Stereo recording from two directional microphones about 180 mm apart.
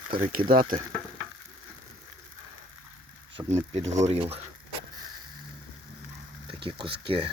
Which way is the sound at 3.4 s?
15° right (ahead or behind).